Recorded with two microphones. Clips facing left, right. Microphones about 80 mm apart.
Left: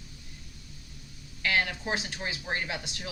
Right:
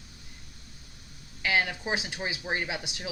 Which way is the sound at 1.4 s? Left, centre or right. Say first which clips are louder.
Right 1 dB; centre.